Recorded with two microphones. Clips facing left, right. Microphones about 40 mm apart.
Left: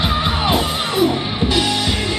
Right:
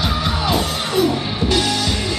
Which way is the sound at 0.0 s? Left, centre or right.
Left.